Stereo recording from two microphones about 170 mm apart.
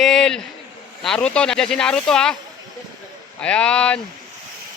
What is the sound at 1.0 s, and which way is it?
Speech, 5° left (ahead or behind).